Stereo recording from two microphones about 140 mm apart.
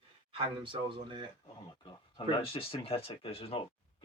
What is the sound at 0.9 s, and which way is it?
Speech, 35° right (ahead or behind).